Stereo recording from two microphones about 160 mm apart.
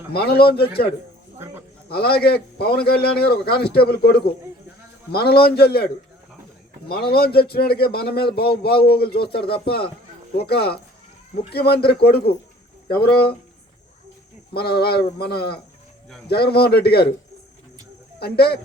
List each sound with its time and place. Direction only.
0.1 s a man's voice: 80° left
1.9 s a man's voice: 80° left
14.5 s a man's voice: 80° left
18.2 s speech: 80° left